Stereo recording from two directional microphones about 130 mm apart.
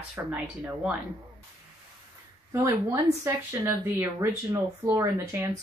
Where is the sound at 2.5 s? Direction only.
25° right (ahead or behind).